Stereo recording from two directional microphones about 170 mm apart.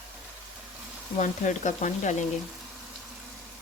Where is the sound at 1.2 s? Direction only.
45° left (ahead or behind).